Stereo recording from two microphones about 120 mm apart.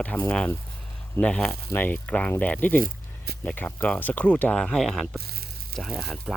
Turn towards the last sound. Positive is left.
turn(degrees=0)  # may be behind; listen again after turning